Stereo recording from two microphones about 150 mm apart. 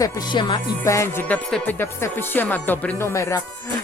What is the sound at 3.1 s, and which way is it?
Music, 20° left (ahead or behind).